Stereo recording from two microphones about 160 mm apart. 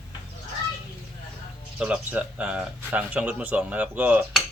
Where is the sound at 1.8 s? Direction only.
5° right (ahead or behind).